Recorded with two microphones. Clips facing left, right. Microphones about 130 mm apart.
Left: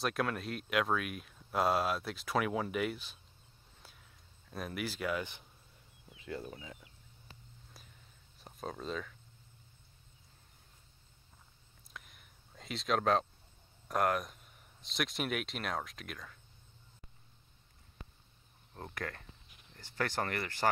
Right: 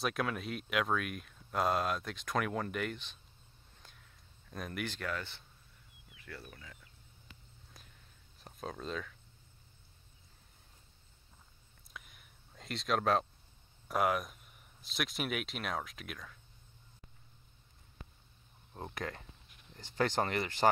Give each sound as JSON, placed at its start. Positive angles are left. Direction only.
{"t": 0.0, "sound": "speech", "side_deg": 0}
{"t": 3.8, "sound": "a sound", "side_deg": 5}
{"t": 8.4, "sound": "speech", "side_deg": 0}
{"t": 11.9, "sound": "a sound", "side_deg": 0}
{"t": 13.8, "sound": "speech", "side_deg": -5}
{"t": 18.7, "sound": "speech", "side_deg": -15}